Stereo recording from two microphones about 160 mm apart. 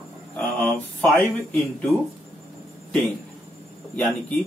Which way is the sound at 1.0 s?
15° left (ahead or behind).